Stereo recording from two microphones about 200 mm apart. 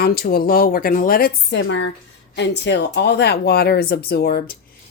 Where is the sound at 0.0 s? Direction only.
50° left (ahead or behind).